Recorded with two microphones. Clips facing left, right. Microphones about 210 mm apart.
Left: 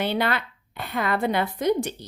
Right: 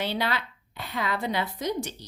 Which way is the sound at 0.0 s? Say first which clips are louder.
Left 4 dB; 55° left (ahead or behind).